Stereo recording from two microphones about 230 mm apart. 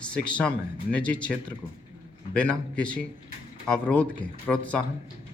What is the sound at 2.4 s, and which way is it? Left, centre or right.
Speech, centre.